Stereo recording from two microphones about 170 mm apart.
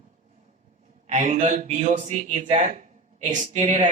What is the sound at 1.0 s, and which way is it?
A man's voice, 40° right (ahead or behind).